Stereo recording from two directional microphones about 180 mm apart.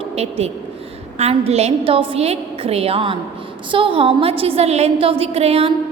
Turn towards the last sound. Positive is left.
turn(degrees=-35)  # may be behind; listen again after turning